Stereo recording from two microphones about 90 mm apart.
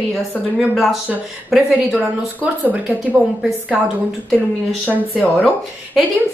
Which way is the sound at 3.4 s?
5° right (ahead or behind).